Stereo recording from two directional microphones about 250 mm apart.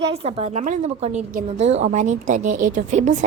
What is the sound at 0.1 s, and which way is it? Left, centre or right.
A woman's voice, right.